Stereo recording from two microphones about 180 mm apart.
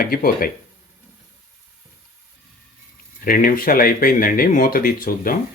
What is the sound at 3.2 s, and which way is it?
Speech, 50° left (ahead or behind).